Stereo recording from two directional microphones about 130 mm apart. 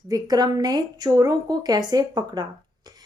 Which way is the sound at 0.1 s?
30° right (ahead or behind).